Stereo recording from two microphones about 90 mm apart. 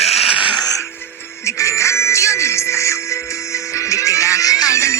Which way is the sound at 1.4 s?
35° left (ahead or behind).